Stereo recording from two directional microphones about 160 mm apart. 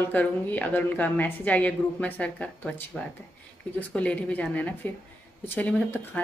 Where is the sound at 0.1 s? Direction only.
10° left (ahead or behind).